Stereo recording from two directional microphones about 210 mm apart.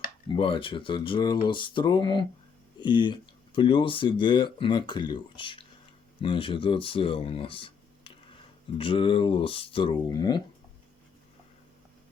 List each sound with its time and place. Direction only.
0.3 s speech: 25° left (ahead or behind)